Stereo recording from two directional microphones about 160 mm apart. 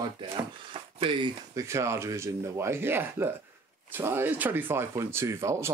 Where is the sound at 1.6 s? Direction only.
20° right (ahead or behind).